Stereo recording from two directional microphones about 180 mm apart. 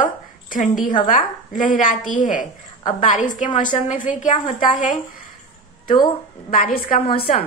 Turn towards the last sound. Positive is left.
turn(degrees=50)  # may be behind; listen again after turning